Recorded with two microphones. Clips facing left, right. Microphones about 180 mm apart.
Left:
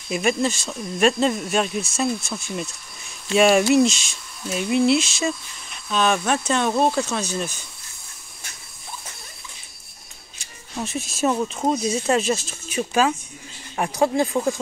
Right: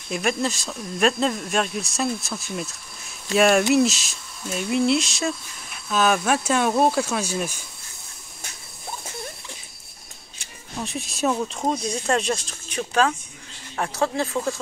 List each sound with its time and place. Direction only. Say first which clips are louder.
0.1 s speech: left 3 dB; centre (ahead or behind)
10.8 s speech: left 2 dB; centre (ahead or behind)